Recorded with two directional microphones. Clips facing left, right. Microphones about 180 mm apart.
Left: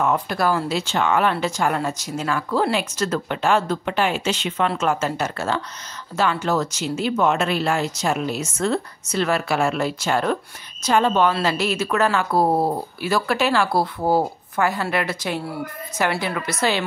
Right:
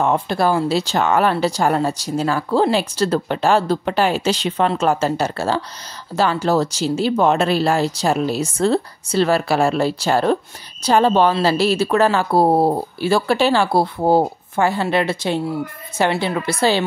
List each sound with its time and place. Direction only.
0.0 s speech: 30° right (ahead or behind)